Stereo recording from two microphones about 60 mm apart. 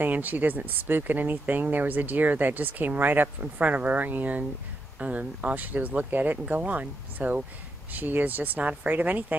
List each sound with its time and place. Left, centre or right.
0.0 s speech: right